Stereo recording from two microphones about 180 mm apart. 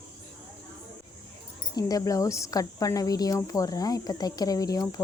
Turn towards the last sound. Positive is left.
turn(degrees=20)  # may be behind; listen again after turning